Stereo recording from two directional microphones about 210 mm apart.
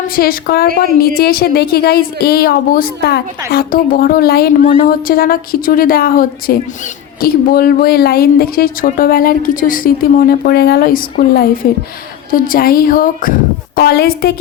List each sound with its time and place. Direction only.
0.2 s speech: 45° left (ahead or behind)